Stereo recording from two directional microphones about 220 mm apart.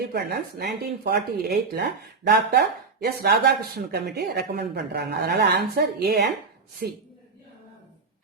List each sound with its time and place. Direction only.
0.1 s speech: 45° right (ahead or behind)